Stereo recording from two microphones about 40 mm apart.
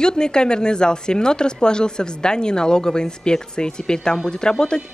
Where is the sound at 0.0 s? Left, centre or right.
Centre.